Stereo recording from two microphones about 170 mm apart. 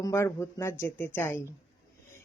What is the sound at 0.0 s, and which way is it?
Speech, 15° left (ahead or behind).